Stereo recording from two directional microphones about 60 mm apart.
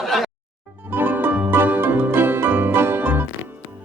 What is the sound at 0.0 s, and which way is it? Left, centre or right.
Music, centre.